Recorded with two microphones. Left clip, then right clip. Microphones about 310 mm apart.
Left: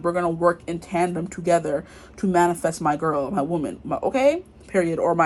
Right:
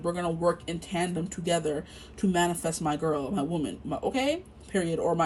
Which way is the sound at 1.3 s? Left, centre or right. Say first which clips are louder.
Left 8 dB; centre.